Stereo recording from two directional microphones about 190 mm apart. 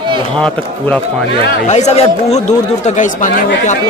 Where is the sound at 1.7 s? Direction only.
35° left (ahead or behind).